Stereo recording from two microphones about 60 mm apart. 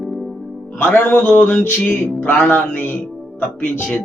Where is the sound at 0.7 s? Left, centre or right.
Left.